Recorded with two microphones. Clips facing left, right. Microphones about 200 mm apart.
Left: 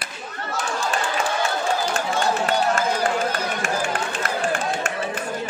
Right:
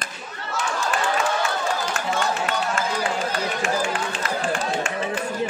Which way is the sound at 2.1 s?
40° left (ahead or behind).